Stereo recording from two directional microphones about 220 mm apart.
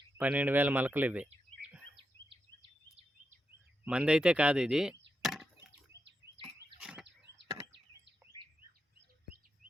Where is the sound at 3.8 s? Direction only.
5° right (ahead or behind).